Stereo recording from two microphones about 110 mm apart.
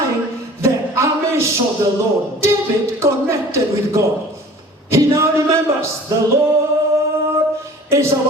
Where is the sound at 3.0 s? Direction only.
25° right (ahead or behind).